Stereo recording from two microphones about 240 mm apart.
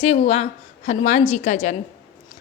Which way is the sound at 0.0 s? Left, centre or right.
Left.